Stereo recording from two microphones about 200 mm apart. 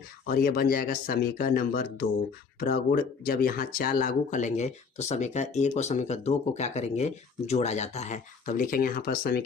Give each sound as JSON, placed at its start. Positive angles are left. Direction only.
{"t": 0.3, "sound": "speech", "side_deg": 50}